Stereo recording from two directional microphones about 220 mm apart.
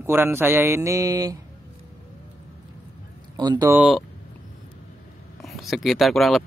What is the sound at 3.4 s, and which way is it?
Speech, 20° right (ahead or behind).